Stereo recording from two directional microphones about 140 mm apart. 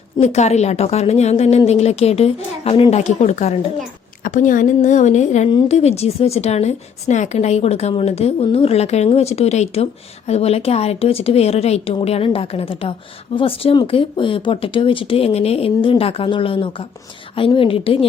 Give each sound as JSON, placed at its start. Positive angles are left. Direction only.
{"t": 0.2, "sound": "a woman's voice", "side_deg": 50}
{"t": 4.2, "sound": "a woman's voice", "side_deg": 70}